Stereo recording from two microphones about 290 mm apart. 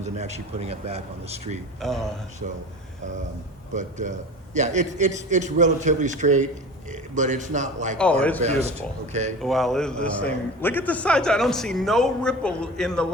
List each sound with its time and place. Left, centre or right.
0.0 s a man's voice: right
1.8 s a man's voice: centre
3.8 s a man's voice: right
7.9 s a man's voice: centre
8.4 s a man's voice: right
9.4 s a man's voice: centre